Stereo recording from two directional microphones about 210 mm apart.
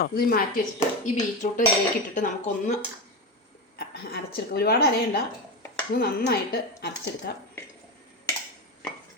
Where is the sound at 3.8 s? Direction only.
50° left (ahead or behind).